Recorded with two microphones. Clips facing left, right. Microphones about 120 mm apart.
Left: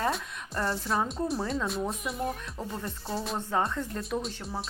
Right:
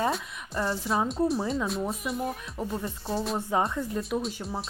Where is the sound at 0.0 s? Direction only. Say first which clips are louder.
Right 2 dB; centre (ahead or behind).